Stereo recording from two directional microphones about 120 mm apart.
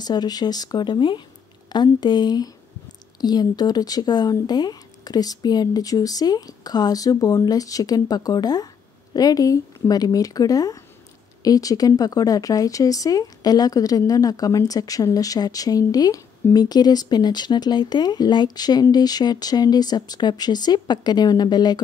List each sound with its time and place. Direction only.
0.0 s speech: 35° left (ahead or behind)